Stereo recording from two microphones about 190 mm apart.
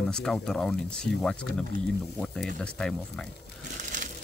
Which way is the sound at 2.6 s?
5° left (ahead or behind).